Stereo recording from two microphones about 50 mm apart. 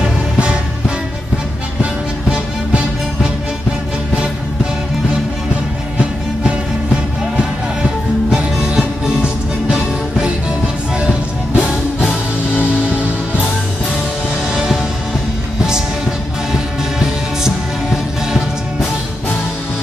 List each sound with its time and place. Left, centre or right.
0.0 s music: centre
5.9 s music: centre
12.0 s music: left
14.5 s music: centre
16.5 s music: centre